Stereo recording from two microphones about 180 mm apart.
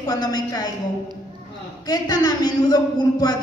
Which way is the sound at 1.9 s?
20° left (ahead or behind).